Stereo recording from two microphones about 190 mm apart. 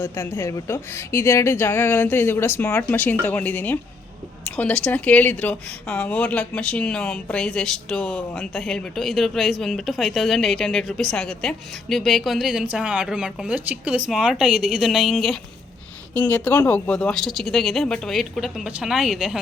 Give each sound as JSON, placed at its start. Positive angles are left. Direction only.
{"t": 0.0, "sound": "a woman's voice", "side_deg": 15}